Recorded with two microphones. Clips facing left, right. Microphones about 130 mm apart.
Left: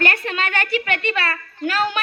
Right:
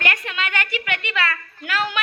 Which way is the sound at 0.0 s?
35° left (ahead or behind).